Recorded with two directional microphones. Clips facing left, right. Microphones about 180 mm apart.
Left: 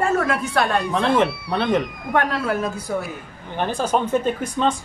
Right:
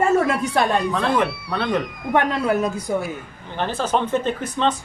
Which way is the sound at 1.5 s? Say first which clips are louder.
Left 2 dB; 20° left (ahead or behind).